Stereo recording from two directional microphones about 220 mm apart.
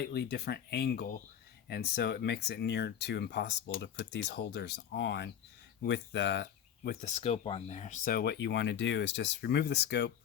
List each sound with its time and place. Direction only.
0.0 s speech: 45° left (ahead or behind)
7.0 s speech: 30° left (ahead or behind); by 10.1 s 50° left (ahead or behind)